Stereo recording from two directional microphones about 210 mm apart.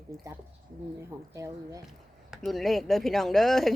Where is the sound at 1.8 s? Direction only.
Centre (ahead or behind).